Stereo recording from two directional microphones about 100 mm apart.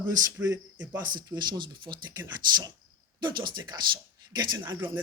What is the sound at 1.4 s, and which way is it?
Speech, 50° right (ahead or behind).